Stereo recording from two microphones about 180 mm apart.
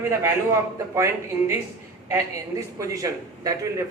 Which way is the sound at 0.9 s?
15° right (ahead or behind).